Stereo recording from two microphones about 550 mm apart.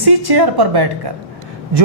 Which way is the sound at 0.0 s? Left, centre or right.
Right.